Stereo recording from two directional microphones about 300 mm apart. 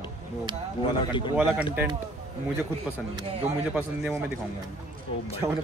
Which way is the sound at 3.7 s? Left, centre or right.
Centre.